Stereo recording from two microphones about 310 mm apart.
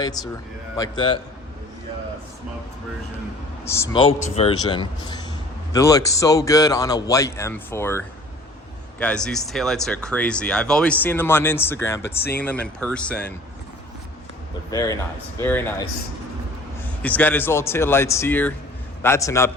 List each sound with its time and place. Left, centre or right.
0.0 s a man's voice: centre
3.8 s a man's voice: centre
14.7 s a man's voice: centre
17.0 s a man's voice: centre